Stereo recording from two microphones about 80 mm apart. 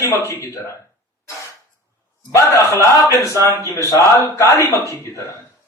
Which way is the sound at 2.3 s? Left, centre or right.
Left.